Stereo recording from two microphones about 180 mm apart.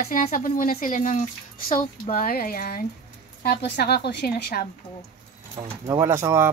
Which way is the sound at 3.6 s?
65° left (ahead or behind).